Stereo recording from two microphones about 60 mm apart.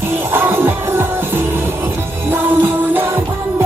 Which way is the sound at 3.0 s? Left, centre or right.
Right.